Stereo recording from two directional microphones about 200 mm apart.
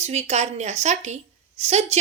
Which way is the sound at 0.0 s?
35° right (ahead or behind).